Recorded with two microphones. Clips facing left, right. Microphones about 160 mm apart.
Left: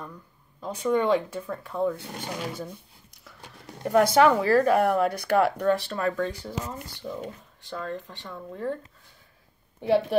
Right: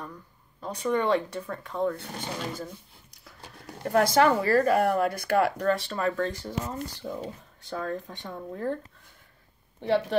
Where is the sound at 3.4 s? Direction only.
20° left (ahead or behind).